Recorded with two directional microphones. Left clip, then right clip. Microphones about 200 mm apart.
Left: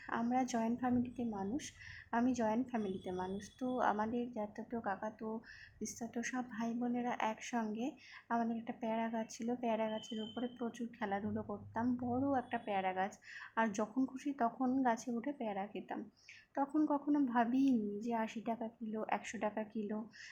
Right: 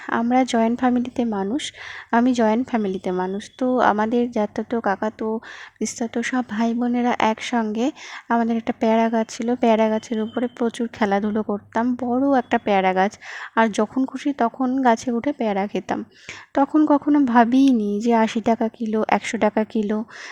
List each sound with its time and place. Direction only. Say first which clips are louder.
0.1 s speech: right 17 dB; 50° right (ahead or behind)